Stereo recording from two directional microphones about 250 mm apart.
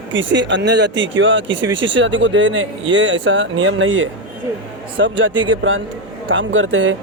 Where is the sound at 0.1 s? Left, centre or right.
Right.